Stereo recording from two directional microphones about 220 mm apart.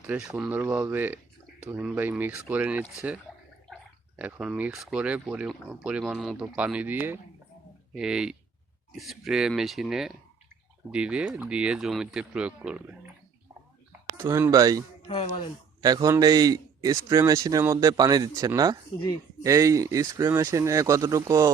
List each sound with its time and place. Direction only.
0.1 s a man's voice: 5° right (ahead or behind)
4.2 s speech: 5° right (ahead or behind)
14.2 s a man's voice: 10° right (ahead or behind)
15.0 s speech: 25° left (ahead or behind)
15.8 s a man's voice: 15° right (ahead or behind)